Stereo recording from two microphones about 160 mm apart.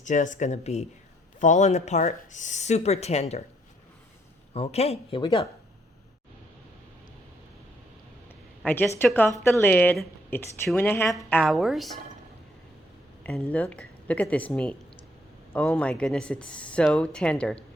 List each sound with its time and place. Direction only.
0.0 s speech: 50° left (ahead or behind)
4.5 s speech: 40° left (ahead or behind)
8.6 s speech: 10° left (ahead or behind)
11.3 s a woman's voice: centre (ahead or behind)
13.2 s speech: 5° left (ahead or behind)